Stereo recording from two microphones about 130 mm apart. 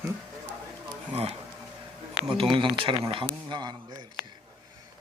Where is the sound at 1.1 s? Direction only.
50° right (ahead or behind).